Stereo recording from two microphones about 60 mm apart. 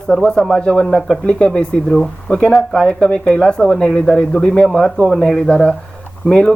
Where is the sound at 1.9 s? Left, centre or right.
Centre.